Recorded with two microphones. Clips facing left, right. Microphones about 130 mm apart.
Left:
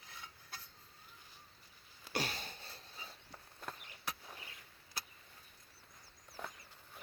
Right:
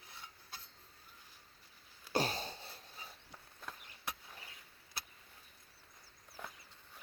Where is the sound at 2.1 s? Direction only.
35° right (ahead or behind).